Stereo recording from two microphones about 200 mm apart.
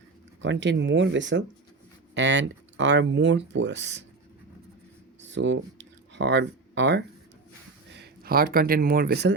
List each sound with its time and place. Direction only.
0.4 s speech: 65° right (ahead or behind)
5.3 s speech: 65° right (ahead or behind)